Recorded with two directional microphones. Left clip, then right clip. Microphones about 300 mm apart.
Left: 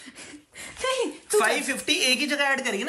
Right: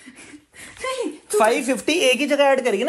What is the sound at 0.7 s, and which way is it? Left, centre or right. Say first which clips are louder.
Speech: even; centre.